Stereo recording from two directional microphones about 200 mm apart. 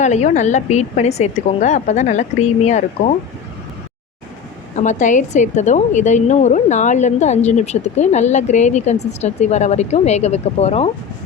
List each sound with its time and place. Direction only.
0.0 s a woman's voice: 35° left (ahead or behind)
4.8 s a woman's voice: 40° left (ahead or behind)